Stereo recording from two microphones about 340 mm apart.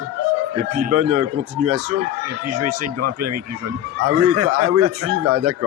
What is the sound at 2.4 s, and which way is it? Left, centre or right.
A man's voice, right.